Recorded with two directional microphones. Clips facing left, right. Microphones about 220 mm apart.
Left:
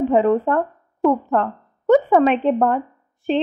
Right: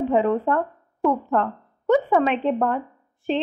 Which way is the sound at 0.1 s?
45° left (ahead or behind).